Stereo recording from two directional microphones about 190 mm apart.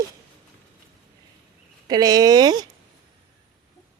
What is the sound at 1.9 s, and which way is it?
Speech, 20° right (ahead or behind).